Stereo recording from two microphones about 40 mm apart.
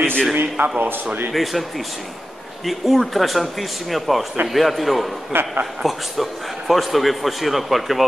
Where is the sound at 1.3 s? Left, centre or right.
Centre.